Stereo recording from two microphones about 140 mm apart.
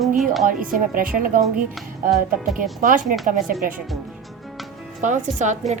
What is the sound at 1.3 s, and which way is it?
Speech, 90° right.